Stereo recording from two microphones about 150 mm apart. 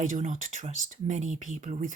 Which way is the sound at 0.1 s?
55° right (ahead or behind).